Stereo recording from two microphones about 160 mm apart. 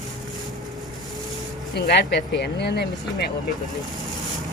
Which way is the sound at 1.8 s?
90° left.